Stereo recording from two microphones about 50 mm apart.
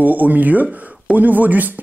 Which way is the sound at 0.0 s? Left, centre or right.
Right.